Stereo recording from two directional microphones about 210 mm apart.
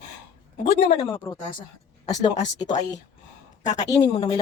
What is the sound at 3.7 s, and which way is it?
Speech, 20° left (ahead or behind).